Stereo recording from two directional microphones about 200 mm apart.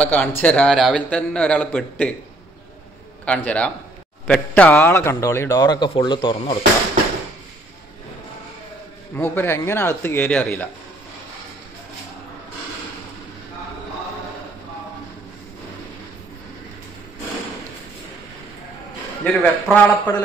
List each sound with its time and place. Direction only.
0.1 s a man's voice: 10° left (ahead or behind)
3.3 s a man's voice: 5° left (ahead or behind); by 6.6 s 25° left (ahead or behind)
9.1 s a man's voice: 10° left (ahead or behind)
19.2 s a man's voice: 5° left (ahead or behind)